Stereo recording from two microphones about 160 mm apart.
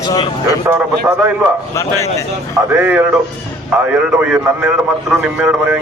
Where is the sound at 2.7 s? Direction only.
10° right (ahead or behind).